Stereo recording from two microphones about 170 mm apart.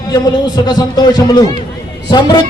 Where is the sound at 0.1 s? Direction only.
25° left (ahead or behind).